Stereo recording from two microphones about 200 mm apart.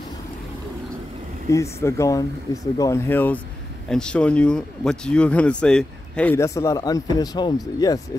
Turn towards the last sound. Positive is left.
turn(degrees=20)  # may be behind; listen again after turning